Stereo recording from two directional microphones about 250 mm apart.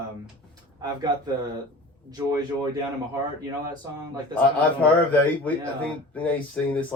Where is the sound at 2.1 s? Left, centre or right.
Centre.